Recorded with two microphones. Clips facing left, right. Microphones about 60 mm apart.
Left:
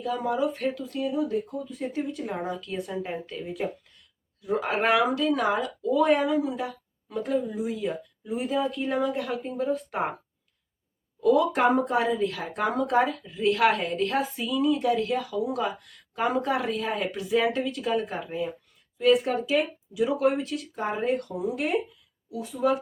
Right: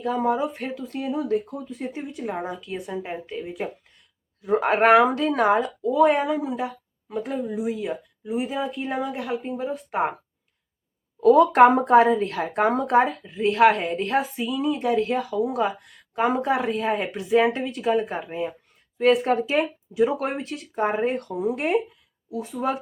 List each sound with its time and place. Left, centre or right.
0.0 s speech: right
0.9 s speech: right
1.8 s a woman's voice: centre
4.4 s a woman's voice: right; by 10.2 s centre
11.2 s a woman's voice: right
18.9 s speech: right